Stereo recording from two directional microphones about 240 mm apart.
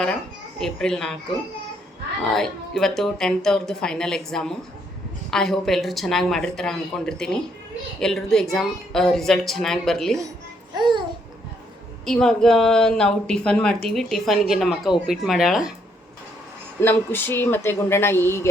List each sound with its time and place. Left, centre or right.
0.6 s speech: centre
2.3 s speech: centre
12.0 s speech: centre
16.8 s speech: centre